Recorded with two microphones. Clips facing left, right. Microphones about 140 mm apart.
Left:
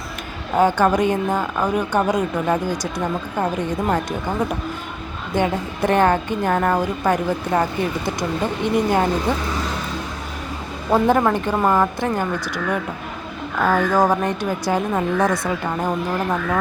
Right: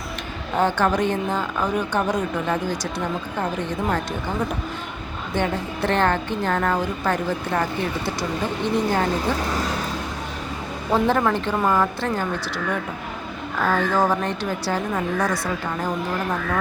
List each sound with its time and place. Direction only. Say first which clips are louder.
0.5 s a woman's voice: left 4 dB; 10° left (ahead or behind)
10.9 s a woman's voice: left 3 dB; 15° left (ahead or behind)
13.6 s a woman's voice: left 3 dB; 15° left (ahead or behind)